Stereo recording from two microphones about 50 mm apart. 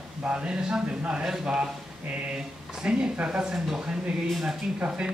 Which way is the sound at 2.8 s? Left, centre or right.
Centre.